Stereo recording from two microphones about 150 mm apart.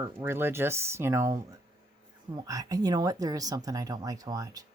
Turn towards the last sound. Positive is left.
turn(degrees=-25)  # may be behind; listen again after turning